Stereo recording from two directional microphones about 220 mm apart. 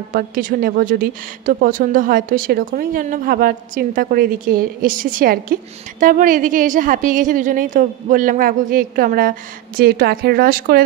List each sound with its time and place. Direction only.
0.1 s a woman's voice: 40° right (ahead or behind)